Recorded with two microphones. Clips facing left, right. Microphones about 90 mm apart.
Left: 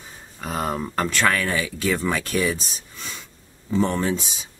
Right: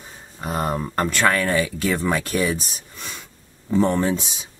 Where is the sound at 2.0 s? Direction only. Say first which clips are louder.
Right 1 dB; 20° right (ahead or behind).